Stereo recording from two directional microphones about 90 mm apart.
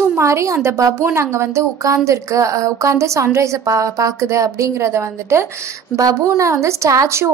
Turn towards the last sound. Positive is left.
turn(degrees=-30)  # may be behind; listen again after turning